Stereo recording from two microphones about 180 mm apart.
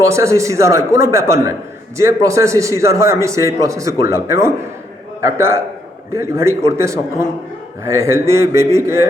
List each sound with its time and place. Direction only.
0.0 s a man's voice: 15° right (ahead or behind)